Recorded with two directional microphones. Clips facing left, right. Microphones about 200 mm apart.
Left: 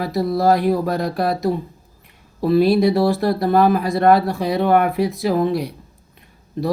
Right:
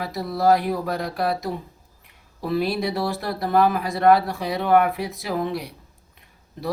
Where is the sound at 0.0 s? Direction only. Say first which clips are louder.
Left 4 dB; 40° left (ahead or behind).